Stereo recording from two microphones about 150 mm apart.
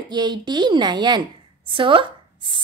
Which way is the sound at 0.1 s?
25° right (ahead or behind).